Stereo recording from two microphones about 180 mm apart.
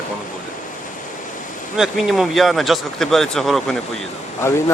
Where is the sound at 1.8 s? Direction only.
Centre (ahead or behind).